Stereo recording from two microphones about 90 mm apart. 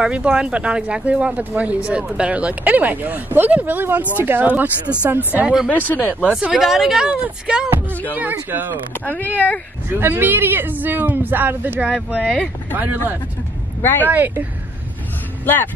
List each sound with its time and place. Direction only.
0.0 s speech: 10° right (ahead or behind)
5.8 s speech: 20° left (ahead or behind)
6.2 s speech: 10° right (ahead or behind)
9.0 s speech: 20° left (ahead or behind)
9.8 s speech: 25° right (ahead or behind)
15.4 s speech: 20° left (ahead or behind)